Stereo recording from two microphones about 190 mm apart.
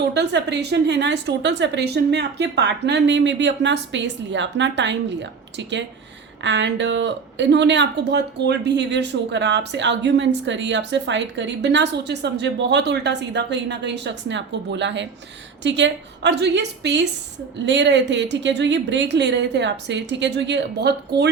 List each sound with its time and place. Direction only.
0.0 s a woman's voice: 65° right (ahead or behind)